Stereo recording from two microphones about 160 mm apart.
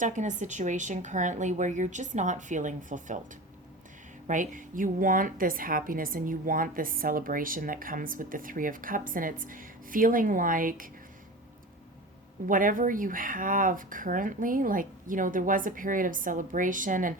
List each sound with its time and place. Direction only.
0.0 s speech: 50° right (ahead or behind)
4.3 s a woman's voice: 55° right (ahead or behind)
12.5 s a woman's voice: 55° right (ahead or behind)